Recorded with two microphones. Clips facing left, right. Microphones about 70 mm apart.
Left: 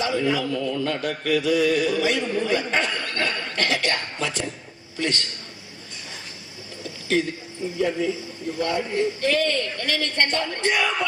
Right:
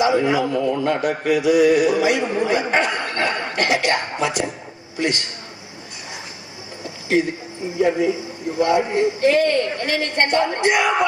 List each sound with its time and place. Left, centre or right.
0.0 s a man's voice: right
6.8 s a sound: right
7.8 s a man's voice: right